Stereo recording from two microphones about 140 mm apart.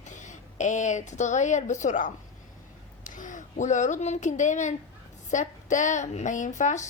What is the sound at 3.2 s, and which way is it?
A woman's voice, 65° left (ahead or behind).